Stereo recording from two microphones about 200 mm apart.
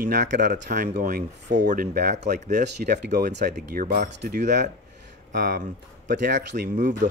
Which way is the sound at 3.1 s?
40° right (ahead or behind).